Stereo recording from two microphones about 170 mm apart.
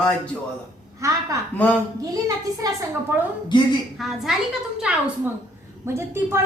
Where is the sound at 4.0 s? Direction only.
Centre (ahead or behind).